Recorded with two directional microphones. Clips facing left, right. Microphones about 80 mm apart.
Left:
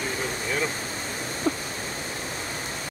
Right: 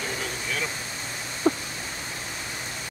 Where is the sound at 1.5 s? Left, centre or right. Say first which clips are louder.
Right 4 dB; right.